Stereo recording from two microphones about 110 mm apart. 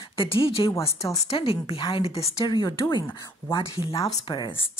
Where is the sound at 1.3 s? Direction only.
60° left (ahead or behind).